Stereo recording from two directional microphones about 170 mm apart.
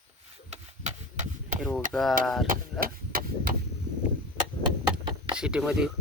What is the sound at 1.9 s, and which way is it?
Speech, centre (ahead or behind).